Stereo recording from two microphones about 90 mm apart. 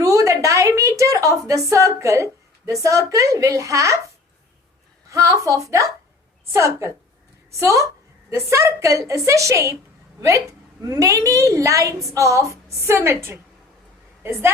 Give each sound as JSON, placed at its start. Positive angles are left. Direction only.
{"t": 0.0, "sound": "a woman's voice", "side_deg": -40}
{"t": 5.0, "sound": "a woman's voice", "side_deg": -35}